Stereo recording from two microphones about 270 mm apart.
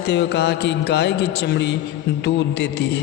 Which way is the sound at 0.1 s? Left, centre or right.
Left.